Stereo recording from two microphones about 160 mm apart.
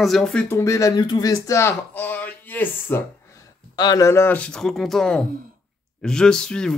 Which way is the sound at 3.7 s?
25° left (ahead or behind).